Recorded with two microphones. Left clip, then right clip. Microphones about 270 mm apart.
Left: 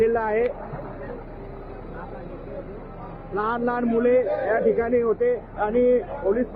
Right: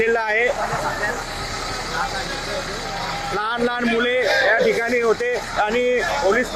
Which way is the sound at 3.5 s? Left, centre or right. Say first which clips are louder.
Right 2 dB; centre.